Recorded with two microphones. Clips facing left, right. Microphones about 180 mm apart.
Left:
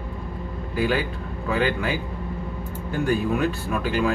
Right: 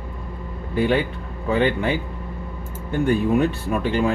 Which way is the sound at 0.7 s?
25° right (ahead or behind).